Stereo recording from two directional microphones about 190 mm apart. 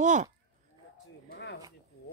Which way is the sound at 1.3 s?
60° left (ahead or behind).